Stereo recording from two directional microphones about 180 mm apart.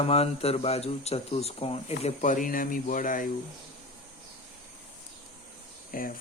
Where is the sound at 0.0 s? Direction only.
35° left (ahead or behind).